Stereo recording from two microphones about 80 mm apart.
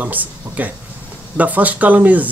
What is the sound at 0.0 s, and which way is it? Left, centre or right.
Speech, centre.